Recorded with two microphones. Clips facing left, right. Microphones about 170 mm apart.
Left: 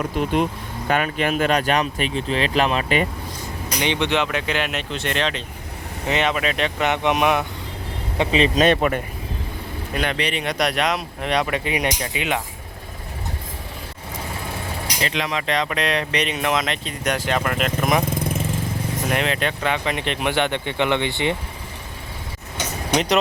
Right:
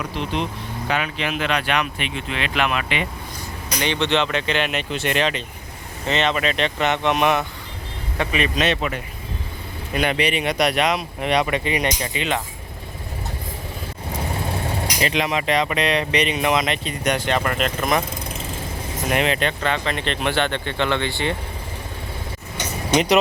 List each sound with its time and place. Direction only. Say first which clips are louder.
0.0 s speech: left 4 dB; 50° left (ahead or behind)
3.8 s speech: even; 15° left (ahead or behind); by 5.4 s 5° right (ahead or behind)
6.1 s speech: even; 10° left (ahead or behind)
8.2 s speech: left 4 dB; 30° left (ahead or behind)
8.6 s speech: left 5 dB; 50° left (ahead or behind)
9.9 s speech: right 3 dB; 5° right (ahead or behind)
15.0 s speech: right 3 dB; 15° right (ahead or behind); by 18.0 s 5° left (ahead or behind)
19.1 s speech: right 3 dB; 5° right (ahead or behind); by 21.3 s 20° left (ahead or behind)